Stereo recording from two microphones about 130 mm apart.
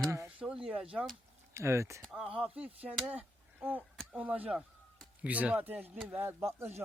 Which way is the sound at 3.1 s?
15° right (ahead or behind).